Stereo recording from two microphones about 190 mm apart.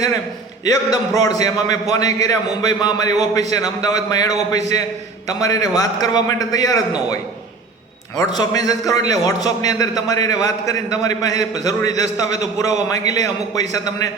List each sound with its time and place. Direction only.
0.6 s a man's voice: 20° left (ahead or behind)
8.2 s a man's voice: 20° left (ahead or behind)